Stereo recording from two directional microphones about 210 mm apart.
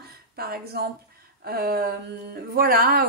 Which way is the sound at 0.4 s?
45° right (ahead or behind).